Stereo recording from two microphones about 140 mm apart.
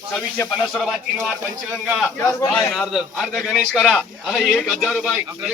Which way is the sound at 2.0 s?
15° left (ahead or behind).